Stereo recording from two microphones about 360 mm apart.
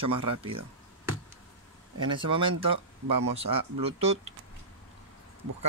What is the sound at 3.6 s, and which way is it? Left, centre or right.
Speech, right.